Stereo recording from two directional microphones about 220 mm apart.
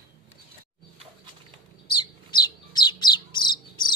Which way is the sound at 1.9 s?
20° left (ahead or behind).